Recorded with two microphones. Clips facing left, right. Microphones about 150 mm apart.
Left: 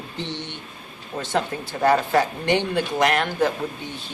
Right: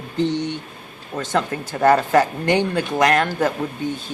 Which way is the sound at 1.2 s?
45° right (ahead or behind).